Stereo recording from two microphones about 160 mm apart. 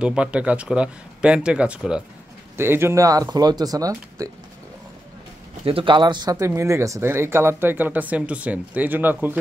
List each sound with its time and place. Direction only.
0.0 s speech: 5° right (ahead or behind)
5.7 s speech: 35° right (ahead or behind); by 9.4 s 10° right (ahead or behind)